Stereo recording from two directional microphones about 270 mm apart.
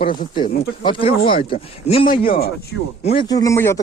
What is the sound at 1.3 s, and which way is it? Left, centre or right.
Speech, centre.